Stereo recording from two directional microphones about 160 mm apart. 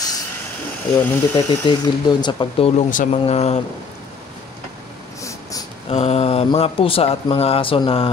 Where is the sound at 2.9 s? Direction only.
55° left (ahead or behind).